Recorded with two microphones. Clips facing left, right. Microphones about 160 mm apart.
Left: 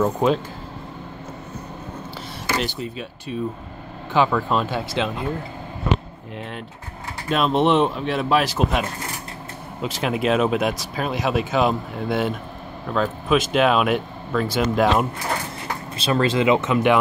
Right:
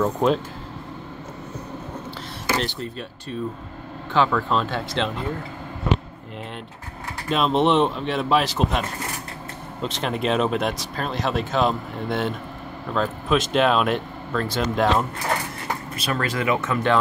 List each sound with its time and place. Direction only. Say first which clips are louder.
0.0 s speech: left 1 dB; 5° left (ahead or behind)
2.6 s speech: left 1 dB; 5° left (ahead or behind)
7.2 s speech: left 1 dB; 5° left (ahead or behind)
16.0 s speech: left 7 dB; 25° left (ahead or behind)